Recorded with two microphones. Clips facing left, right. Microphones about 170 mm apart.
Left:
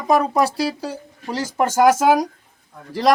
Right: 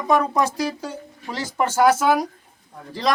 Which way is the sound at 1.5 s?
45° left (ahead or behind).